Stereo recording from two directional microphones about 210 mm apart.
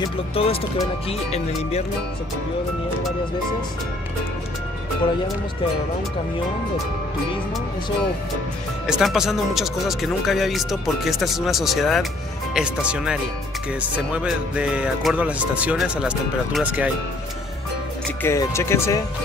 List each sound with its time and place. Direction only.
0.0 s speech: 25° left (ahead or behind)
8.8 s speech: centre (ahead or behind)
18.2 s speech: 10° left (ahead or behind)